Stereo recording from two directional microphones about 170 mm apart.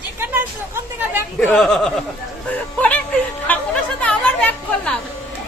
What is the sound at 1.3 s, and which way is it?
Speech, 5° left (ahead or behind).